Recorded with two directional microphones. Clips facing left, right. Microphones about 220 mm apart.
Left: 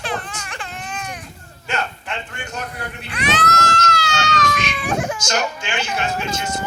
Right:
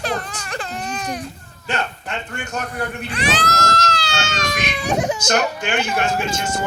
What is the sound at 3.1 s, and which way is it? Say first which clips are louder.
Speech: left 1 dB; 30° right (ahead or behind).